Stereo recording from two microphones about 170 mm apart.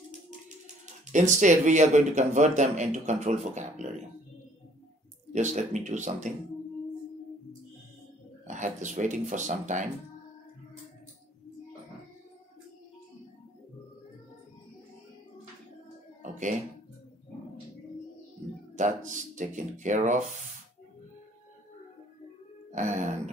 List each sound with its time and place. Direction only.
1.1 s speech: 45° right (ahead or behind)
5.3 s speech: 45° right (ahead or behind)
8.5 s speech: 45° right (ahead or behind)
16.2 s a sound: 45° right (ahead or behind)
18.8 s speech: 45° right (ahead or behind)
22.7 s speech: 50° right (ahead or behind)